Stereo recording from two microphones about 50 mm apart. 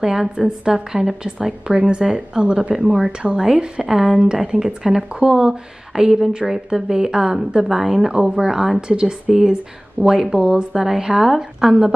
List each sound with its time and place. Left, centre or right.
0.0 s a woman's voice: centre
1.7 s speech: right
2.0 s a woman's voice: centre
4.1 s speech: right
4.4 s a woman's voice: centre
10.2 s speech: right
10.8 s a woman's voice: centre